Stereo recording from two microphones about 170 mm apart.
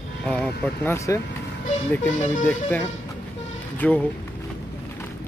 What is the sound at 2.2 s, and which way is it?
Speech, 45° left (ahead or behind).